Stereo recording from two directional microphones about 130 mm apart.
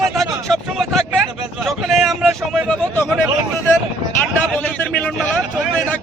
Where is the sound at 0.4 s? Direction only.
Centre (ahead or behind).